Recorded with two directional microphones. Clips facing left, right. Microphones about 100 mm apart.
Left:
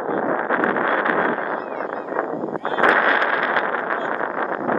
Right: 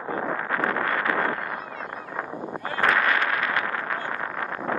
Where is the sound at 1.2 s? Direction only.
40° left (ahead or behind); by 2.6 s 60° left (ahead or behind).